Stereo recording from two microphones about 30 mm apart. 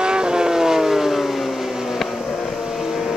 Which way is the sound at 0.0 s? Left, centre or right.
Right.